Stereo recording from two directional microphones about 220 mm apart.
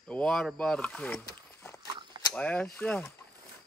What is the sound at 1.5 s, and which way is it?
Walk, 10° left (ahead or behind).